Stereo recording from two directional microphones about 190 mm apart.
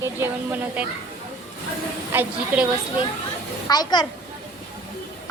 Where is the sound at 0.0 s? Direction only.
10° right (ahead or behind).